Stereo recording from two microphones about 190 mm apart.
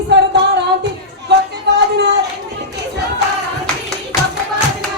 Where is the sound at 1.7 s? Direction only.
65° right (ahead or behind).